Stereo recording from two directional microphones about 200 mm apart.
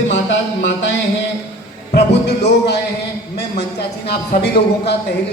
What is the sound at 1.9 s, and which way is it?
Speech, 55° left (ahead or behind).